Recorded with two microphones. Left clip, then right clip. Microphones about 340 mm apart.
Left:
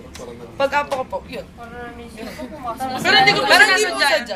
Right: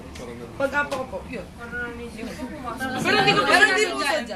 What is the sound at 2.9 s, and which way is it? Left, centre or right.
Speech, left.